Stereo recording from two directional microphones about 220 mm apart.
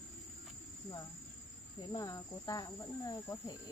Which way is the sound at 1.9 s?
15° left (ahead or behind).